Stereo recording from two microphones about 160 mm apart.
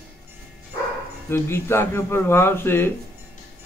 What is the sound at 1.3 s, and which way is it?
Speech, 15° left (ahead or behind).